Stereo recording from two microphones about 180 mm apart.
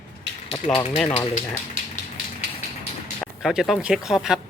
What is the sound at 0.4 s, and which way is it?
Speech, 30° left (ahead or behind).